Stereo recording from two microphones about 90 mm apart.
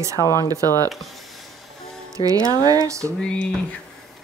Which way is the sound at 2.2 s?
90° left.